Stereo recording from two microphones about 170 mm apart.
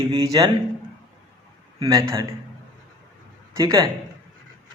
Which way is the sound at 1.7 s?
20° right (ahead or behind).